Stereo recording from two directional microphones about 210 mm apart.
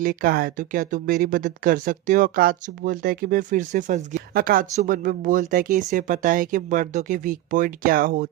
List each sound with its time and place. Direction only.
0.0 s speech: 40° right (ahead or behind)